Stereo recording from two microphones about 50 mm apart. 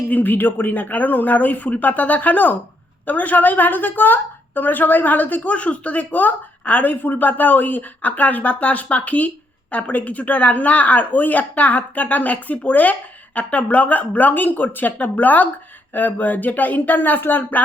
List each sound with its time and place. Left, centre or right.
0.1 s a woman's voice: left